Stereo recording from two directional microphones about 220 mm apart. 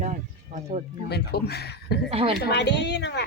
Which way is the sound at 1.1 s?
45° left (ahead or behind).